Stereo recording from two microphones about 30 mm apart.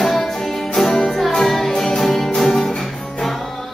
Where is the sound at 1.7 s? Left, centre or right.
Left.